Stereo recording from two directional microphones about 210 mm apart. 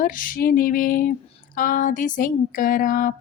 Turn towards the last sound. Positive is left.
turn(degrees=40)  # may be behind; listen again after turning